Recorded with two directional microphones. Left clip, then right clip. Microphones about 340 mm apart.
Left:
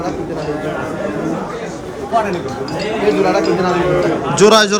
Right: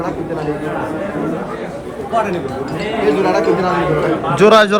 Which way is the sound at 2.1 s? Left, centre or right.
Centre.